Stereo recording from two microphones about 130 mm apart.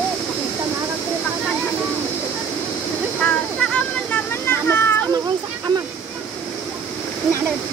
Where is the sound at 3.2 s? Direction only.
10° left (ahead or behind).